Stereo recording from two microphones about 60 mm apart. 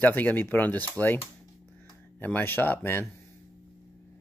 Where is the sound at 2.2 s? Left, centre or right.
Left.